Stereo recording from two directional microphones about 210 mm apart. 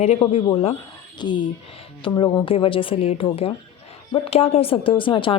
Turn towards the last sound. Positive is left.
turn(degrees=25)  # may be behind; listen again after turning